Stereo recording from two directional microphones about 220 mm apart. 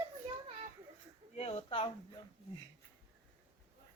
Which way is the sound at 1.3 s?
25° left (ahead or behind).